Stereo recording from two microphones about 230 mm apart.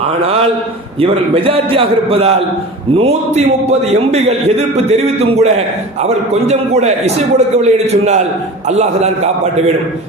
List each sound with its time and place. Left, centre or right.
0.9 s a man's voice: right